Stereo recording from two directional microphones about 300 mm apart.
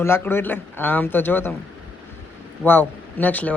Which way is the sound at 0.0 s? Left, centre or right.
Centre.